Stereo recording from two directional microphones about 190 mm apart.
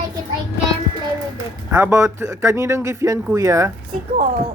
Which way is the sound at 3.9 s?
35° right (ahead or behind).